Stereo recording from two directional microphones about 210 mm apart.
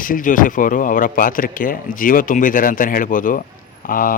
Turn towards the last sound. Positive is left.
turn(degrees=40)  # may be behind; listen again after turning